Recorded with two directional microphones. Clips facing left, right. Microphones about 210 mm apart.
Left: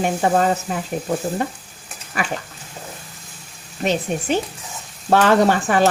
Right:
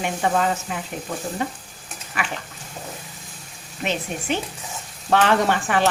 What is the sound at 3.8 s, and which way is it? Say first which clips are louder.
Speech: left 5 dB; 40° left (ahead or behind).